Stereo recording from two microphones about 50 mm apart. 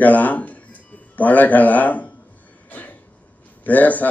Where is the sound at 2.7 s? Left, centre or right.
Left.